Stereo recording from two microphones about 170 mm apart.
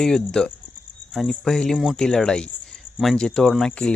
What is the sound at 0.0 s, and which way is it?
Speech, 5° left (ahead or behind).